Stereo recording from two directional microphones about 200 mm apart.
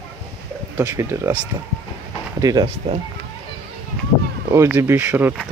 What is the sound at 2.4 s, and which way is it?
Speech, 15° right (ahead or behind).